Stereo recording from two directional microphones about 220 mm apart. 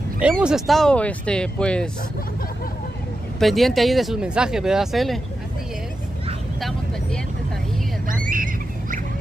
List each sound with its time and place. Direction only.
0.2 s speech: 5° right (ahead or behind)
3.3 s speech: centre (ahead or behind)
8.1 s a sound: 40° right (ahead or behind)